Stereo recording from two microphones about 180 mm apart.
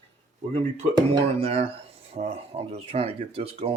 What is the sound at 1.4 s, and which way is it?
Speech, 35° right (ahead or behind).